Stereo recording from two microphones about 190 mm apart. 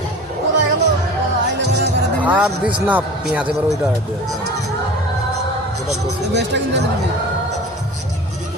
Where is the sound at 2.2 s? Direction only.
10° right (ahead or behind).